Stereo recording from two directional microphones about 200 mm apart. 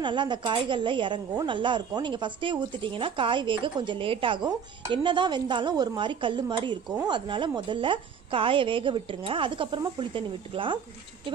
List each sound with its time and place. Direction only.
0.0 s a woman's voice: 25° right (ahead or behind)